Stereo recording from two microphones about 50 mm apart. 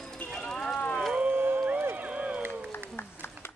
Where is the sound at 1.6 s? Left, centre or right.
Right.